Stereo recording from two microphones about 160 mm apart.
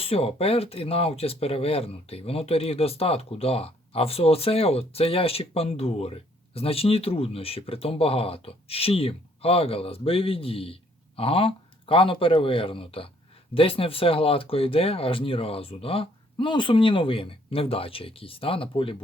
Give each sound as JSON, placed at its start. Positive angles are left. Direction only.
{"t": 0.0, "sound": "speech", "side_deg": 40}